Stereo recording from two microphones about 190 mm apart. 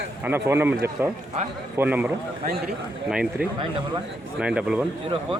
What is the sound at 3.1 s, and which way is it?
Speech, 5° right (ahead or behind).